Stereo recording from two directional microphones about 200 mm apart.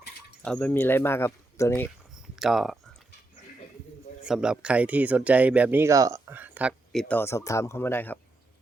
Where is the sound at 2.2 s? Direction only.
Centre (ahead or behind).